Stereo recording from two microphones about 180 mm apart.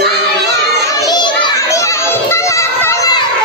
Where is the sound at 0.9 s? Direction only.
20° left (ahead or behind).